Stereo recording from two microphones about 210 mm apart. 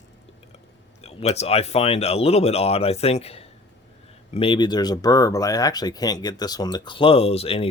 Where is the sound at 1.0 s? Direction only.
30° left (ahead or behind).